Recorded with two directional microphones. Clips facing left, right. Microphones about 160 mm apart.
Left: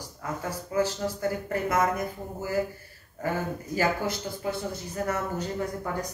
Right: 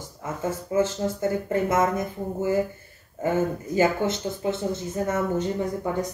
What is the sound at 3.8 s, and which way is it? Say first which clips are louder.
Speech: right 5 dB; 25° right (ahead or behind).